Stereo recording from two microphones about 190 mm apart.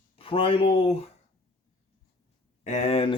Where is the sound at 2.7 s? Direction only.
35° left (ahead or behind).